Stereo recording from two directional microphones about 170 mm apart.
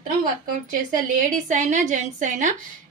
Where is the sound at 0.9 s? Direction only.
50° right (ahead or behind).